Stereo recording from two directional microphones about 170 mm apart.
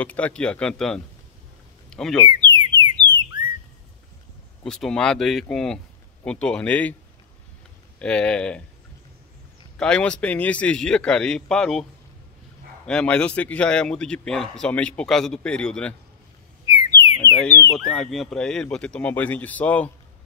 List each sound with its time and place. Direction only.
0.0 s a man's voice: 10° left (ahead or behind)
1.9 s a sound: 5° left (ahead or behind)
2.2 s alarm: 25° right (ahead or behind)
4.6 s a man's voice: 5° left (ahead or behind)
8.0 s a man's voice: 5° left (ahead or behind)
9.8 s a man's voice: 5° left (ahead or behind)
12.8 s a man's voice: 5° left (ahead or behind)
16.7 s alarm: 20° right (ahead or behind)
17.4 s a man's voice: 10° left (ahead or behind)